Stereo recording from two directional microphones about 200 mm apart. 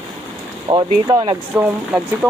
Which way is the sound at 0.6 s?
20° right (ahead or behind).